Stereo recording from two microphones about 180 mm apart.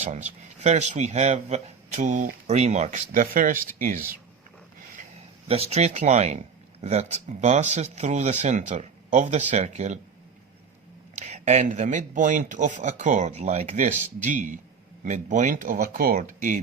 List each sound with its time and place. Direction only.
0.0 s speech: 40° right (ahead or behind)
5.5 s speech: 35° right (ahead or behind)
11.2 s speech: 35° right (ahead or behind)